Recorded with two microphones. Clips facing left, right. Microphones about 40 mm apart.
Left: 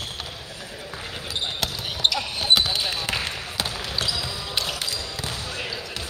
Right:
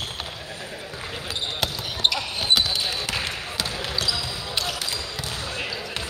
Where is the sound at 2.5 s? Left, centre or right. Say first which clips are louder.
Left 1 dB; centre.